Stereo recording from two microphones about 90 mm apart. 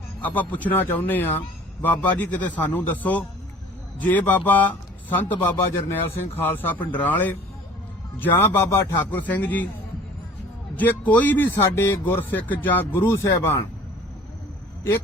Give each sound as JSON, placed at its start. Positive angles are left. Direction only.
{"t": 0.2, "sound": "speech", "side_deg": 20}
{"t": 9.0, "sound": "speech", "side_deg": 20}
{"t": 10.8, "sound": "a man's voice", "side_deg": 20}